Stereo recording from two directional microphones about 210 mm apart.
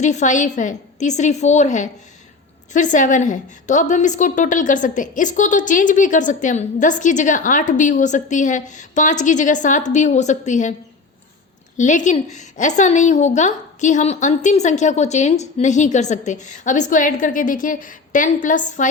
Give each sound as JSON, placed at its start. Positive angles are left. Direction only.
{"t": 0.0, "sound": "a woman's voice", "side_deg": 35}
{"t": 11.8, "sound": "a woman's voice", "side_deg": 35}